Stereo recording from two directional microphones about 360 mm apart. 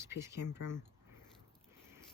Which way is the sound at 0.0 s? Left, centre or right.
Centre.